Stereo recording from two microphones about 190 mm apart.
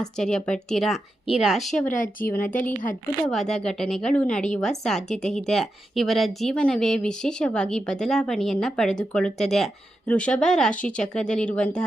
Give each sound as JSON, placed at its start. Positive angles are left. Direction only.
{"t": 0.0, "sound": "a woman's voice", "side_deg": 5}
{"t": 1.9, "sound": "speech", "side_deg": 45}
{"t": 2.2, "sound": "a woman's voice", "side_deg": 10}